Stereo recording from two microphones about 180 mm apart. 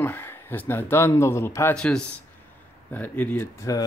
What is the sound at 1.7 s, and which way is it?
Speech, 5° left (ahead or behind).